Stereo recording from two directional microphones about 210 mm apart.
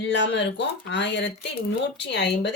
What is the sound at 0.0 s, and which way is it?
Speech, 55° left (ahead or behind).